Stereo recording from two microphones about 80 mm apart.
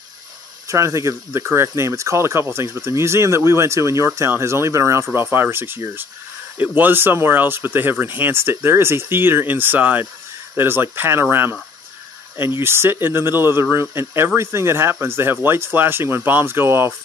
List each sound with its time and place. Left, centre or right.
0.7 s speech: right